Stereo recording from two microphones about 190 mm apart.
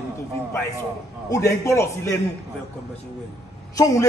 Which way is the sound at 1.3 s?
15° left (ahead or behind).